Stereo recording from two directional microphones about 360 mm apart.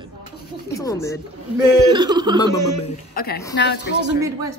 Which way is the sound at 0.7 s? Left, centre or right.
Centre.